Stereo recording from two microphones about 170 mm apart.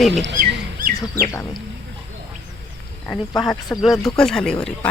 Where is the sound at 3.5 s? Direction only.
20° left (ahead or behind).